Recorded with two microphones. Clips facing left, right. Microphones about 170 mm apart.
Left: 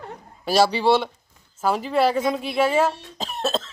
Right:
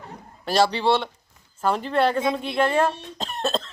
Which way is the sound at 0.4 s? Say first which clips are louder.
Left 2 dB; 5° left (ahead or behind).